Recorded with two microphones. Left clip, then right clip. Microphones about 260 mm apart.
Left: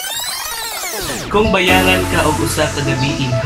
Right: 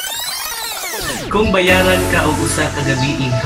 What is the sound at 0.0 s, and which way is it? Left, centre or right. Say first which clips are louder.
Music: even; centre.